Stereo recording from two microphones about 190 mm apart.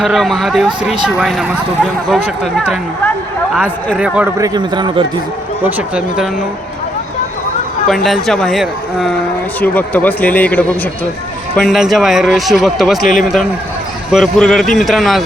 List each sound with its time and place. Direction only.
0.0 s a man's voice: centre (ahead or behind)
3.8 s a man's voice: 5° right (ahead or behind)
4.4 s a man's voice: 20° right (ahead or behind)
5.6 s speech: 5° right (ahead or behind)
7.9 s a man's voice: centre (ahead or behind)